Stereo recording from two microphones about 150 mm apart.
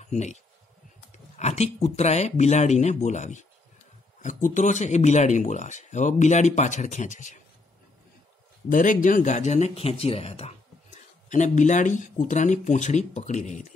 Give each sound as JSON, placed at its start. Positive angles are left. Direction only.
{"t": 0.0, "sound": "speech", "side_deg": 50}
{"t": 8.6, "sound": "speech", "side_deg": 60}